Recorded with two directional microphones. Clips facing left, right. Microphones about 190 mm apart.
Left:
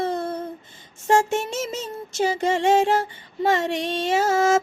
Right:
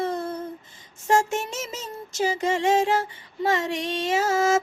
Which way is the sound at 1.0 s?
30° left (ahead or behind).